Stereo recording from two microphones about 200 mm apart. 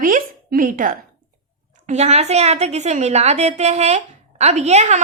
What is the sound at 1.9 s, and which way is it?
A woman's voice, 35° right (ahead or behind).